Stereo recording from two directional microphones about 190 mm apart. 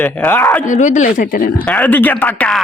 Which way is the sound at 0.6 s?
40° left (ahead or behind).